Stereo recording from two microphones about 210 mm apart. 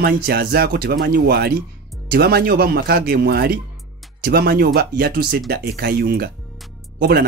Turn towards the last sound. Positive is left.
turn(degrees=-50)  # may be behind; listen again after turning